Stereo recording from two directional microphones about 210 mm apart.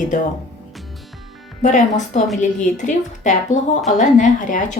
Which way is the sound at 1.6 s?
35° left (ahead or behind).